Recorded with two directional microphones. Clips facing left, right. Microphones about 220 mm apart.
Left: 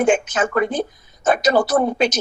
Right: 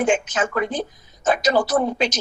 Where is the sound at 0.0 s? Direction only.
55° left (ahead or behind).